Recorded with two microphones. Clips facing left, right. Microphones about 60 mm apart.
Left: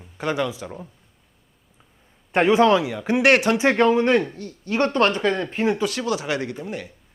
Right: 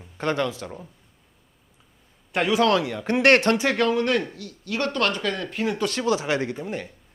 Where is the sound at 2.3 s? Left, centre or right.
Left.